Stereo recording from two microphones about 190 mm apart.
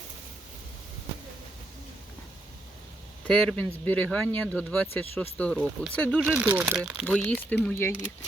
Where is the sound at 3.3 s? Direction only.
5° left (ahead or behind).